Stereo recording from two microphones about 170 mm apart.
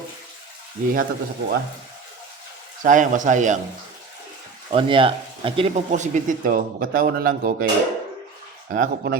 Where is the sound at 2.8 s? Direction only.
50° right (ahead or behind).